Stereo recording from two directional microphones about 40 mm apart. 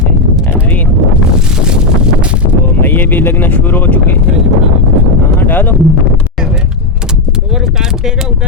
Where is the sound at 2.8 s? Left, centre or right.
Left.